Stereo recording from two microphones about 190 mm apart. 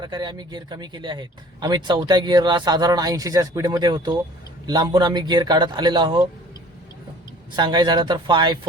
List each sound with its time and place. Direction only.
0.0 s speech: 25° right (ahead or behind)
7.5 s speech: 25° right (ahead or behind)